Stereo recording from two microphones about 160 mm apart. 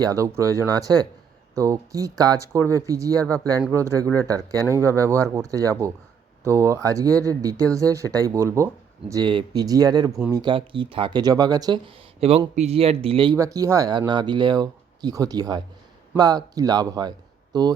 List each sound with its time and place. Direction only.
0.0 s speech: 20° right (ahead or behind)
13.3 s speech: 20° right (ahead or behind)